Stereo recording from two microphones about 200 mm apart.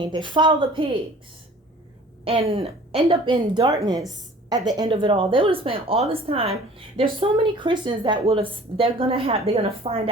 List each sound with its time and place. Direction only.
0.0 s speech: 25° right (ahead or behind)
2.2 s speech: 25° right (ahead or behind)